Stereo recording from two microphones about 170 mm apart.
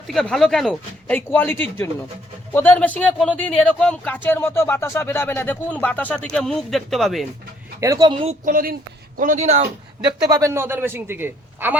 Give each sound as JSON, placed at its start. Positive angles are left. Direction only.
{"t": 0.1, "sound": "speech", "side_deg": 0}
{"t": 7.8, "sound": "speech", "side_deg": -20}
{"t": 8.4, "sound": "speech", "side_deg": -50}
{"t": 10.0, "sound": "a man's voice", "side_deg": -20}